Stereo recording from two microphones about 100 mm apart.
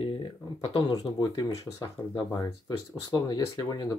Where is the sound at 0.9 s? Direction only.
45° left (ahead or behind).